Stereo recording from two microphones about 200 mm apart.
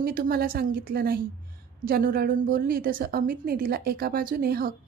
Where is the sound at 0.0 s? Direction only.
50° right (ahead or behind).